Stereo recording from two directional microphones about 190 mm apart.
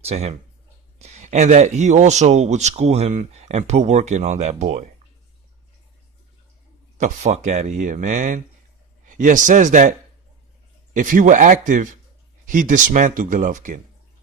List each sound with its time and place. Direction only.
0.0 s speech: 35° right (ahead or behind)
7.0 s speech: 40° right (ahead or behind)
10.9 s speech: 45° right (ahead or behind)